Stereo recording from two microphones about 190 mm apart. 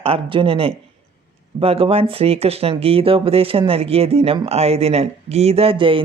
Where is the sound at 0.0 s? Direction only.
30° right (ahead or behind).